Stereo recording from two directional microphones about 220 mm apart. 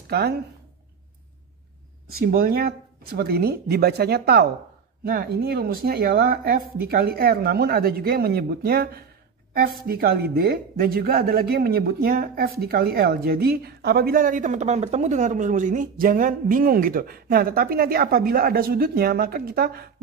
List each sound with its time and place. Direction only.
0.1 s speech: 45° right (ahead or behind)
2.0 s speech: 45° right (ahead or behind)